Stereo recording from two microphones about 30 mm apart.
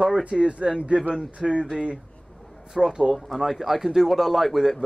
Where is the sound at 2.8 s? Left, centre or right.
Centre.